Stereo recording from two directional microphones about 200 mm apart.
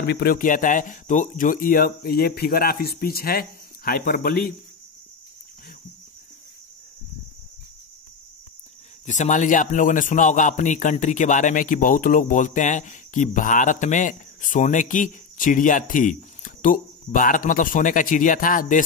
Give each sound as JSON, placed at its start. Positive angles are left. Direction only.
{"t": 0.0, "sound": "speech", "side_deg": 50}
{"t": 9.0, "sound": "a man's voice", "side_deg": 35}